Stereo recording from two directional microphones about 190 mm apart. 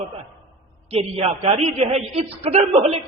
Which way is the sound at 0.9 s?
30° right (ahead or behind).